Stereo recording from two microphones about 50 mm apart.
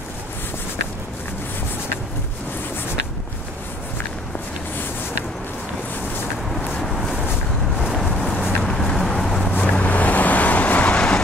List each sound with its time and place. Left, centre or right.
6.8 s a sound: centre
8.1 s vehicle: centre
8.6 s vehicle: centre
9.5 s vehicle: left